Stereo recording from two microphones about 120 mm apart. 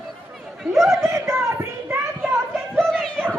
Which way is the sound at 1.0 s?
25° right (ahead or behind).